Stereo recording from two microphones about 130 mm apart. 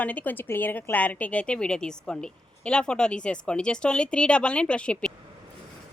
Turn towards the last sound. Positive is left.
turn(degrees=10)  # may be behind; listen again after turning